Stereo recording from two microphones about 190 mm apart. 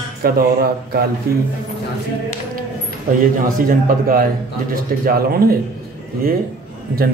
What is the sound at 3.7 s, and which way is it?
Speech, 50° right (ahead or behind).